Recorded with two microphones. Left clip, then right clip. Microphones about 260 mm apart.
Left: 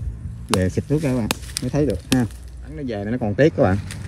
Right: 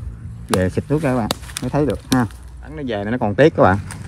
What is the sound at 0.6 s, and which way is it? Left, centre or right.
Speech, centre.